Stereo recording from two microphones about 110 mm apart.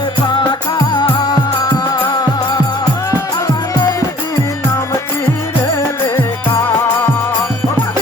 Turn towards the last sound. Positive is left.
turn(degrees=25)  # may be behind; listen again after turning